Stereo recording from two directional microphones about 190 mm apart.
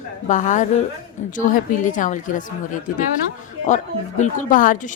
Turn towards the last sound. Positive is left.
turn(degrees=45)  # may be behind; listen again after turning